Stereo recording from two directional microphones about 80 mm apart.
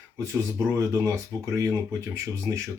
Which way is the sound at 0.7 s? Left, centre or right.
Right.